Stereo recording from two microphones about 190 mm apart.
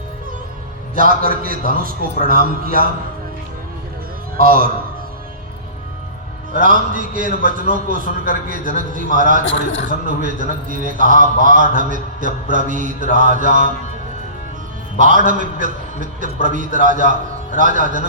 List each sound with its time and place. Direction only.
0.9 s a man's voice: 50° right (ahead or behind)
4.4 s a man's voice: 50° right (ahead or behind)
6.5 s a man's voice: 45° right (ahead or behind)
14.9 s a man's voice: 45° right (ahead or behind)